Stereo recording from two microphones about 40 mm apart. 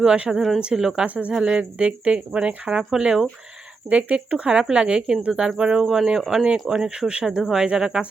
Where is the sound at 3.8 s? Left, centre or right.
Right.